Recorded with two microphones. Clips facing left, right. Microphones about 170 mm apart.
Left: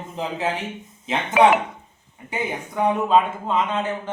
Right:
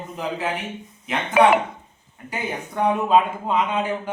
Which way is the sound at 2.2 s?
20° left (ahead or behind).